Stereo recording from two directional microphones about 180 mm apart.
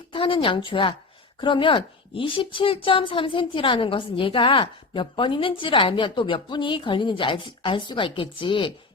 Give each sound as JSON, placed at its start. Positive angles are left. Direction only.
{"t": 0.1, "sound": "a woman's voice", "side_deg": 30}